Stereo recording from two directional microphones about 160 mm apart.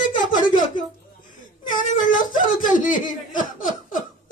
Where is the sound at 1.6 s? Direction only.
55° left (ahead or behind).